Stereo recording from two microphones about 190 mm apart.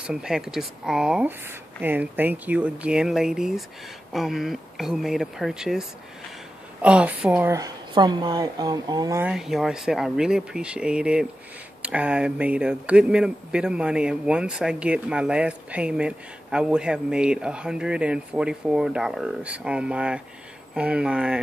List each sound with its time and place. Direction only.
0.0 s a woman's voice: 5° right (ahead or behind); by 9.2 s 20° right (ahead or behind)
9.2 s speech: 5° right (ahead or behind)